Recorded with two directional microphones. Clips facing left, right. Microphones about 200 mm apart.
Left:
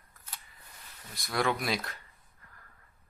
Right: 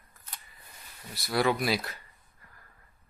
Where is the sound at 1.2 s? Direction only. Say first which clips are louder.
Right 4 dB; 5° right (ahead or behind).